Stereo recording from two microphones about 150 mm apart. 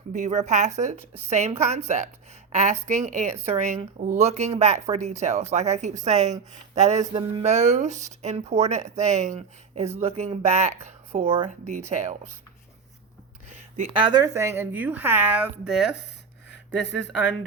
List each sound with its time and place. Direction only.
0.1 s a woman's voice: 50° right (ahead or behind)
13.9 s a woman's voice: 30° right (ahead or behind); by 16.0 s centre (ahead or behind)